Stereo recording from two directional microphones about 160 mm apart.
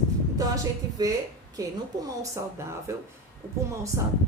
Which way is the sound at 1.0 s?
25° right (ahead or behind).